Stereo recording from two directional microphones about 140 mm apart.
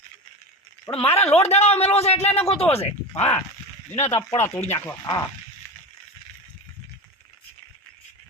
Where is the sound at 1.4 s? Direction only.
50° left (ahead or behind).